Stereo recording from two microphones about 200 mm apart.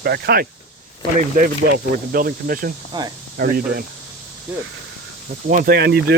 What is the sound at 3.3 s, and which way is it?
Speech, 50° right (ahead or behind).